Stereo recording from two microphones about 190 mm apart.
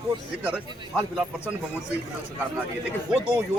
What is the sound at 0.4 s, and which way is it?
Speech, 5° right (ahead or behind).